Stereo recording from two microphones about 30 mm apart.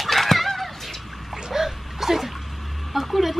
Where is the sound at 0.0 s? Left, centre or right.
Centre.